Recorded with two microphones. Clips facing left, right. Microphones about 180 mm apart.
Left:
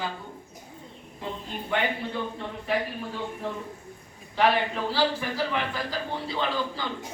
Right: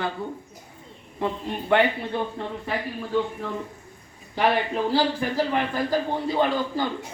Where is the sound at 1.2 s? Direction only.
70° right (ahead or behind).